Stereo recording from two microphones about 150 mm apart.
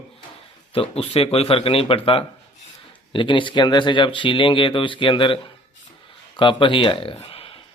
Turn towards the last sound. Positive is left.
turn(degrees=40)  # may be behind; listen again after turning